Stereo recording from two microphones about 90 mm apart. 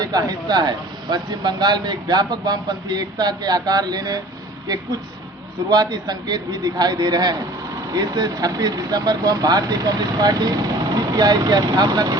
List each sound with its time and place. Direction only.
0.0 s speech: 45° right (ahead or behind)
5.7 s speech: 50° right (ahead or behind)